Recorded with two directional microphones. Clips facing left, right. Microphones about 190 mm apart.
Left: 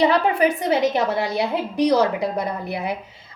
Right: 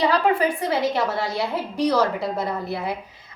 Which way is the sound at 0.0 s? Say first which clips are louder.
Left 2 dB; 20° left (ahead or behind).